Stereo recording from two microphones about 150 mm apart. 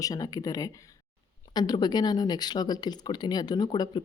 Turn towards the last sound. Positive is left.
turn(degrees=25)  # may be behind; listen again after turning